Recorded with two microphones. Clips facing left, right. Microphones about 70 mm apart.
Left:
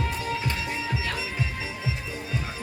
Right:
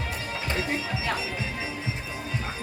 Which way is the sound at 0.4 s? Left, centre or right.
Right.